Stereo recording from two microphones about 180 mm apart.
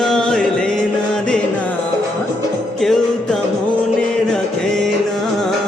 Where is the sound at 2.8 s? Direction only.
Centre (ahead or behind).